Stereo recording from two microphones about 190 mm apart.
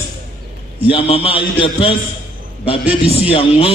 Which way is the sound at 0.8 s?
30° left (ahead or behind).